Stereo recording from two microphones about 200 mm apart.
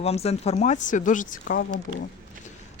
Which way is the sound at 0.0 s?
30° left (ahead or behind).